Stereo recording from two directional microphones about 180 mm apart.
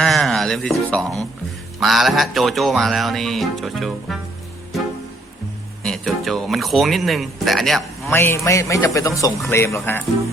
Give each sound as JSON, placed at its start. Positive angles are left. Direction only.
{"t": 0.0, "sound": "speech", "side_deg": 0}
{"t": 1.8, "sound": "music", "side_deg": 0}
{"t": 5.8, "sound": "music", "side_deg": 0}
{"t": 8.1, "sound": "a man's voice", "side_deg": 15}